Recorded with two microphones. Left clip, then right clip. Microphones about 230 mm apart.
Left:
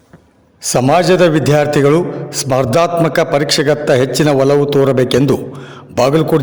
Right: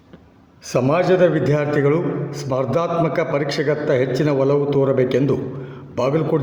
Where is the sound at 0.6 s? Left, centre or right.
Left.